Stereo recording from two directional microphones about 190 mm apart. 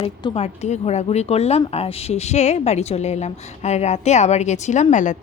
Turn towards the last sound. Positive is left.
turn(degrees=40)  # may be behind; listen again after turning